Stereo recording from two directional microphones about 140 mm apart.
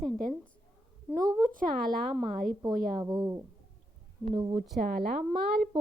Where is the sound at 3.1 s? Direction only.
30° right (ahead or behind).